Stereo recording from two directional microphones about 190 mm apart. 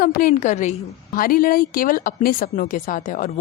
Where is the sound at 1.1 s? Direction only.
50° left (ahead or behind).